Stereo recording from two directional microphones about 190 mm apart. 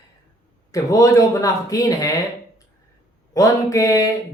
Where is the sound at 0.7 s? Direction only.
15° left (ahead or behind).